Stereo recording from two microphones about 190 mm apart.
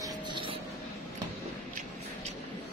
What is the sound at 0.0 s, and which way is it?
Vehicle, 25° right (ahead or behind).